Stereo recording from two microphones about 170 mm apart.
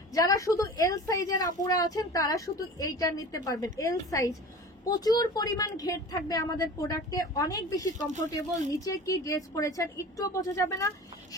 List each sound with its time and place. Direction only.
0.1 s a woman's voice: 20° left (ahead or behind)